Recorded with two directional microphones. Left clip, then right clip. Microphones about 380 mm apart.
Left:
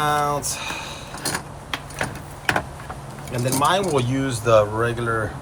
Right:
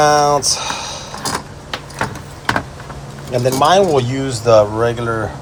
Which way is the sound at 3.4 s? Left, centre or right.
Centre.